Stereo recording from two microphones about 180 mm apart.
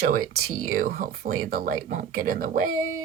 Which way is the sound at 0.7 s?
50° right (ahead or behind).